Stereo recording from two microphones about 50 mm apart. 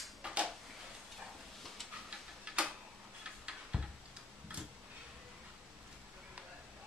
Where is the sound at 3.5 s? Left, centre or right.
Centre.